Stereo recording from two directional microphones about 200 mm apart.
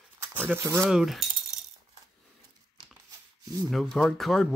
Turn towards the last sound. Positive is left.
turn(degrees=0)  # may be behind; listen again after turning